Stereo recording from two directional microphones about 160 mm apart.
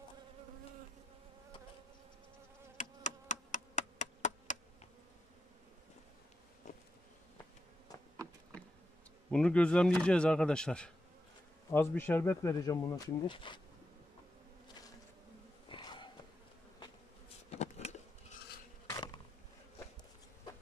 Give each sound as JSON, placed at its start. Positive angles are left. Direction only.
{"t": 2.8, "sound": "insect", "side_deg": 50}
{"t": 6.7, "sound": "bee", "side_deg": 50}
{"t": 9.3, "sound": "speech", "side_deg": 5}
{"t": 15.7, "sound": "a sound", "side_deg": 30}
{"t": 17.5, "sound": "bee", "side_deg": 45}